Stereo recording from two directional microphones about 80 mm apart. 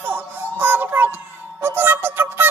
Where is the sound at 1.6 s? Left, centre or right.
Right.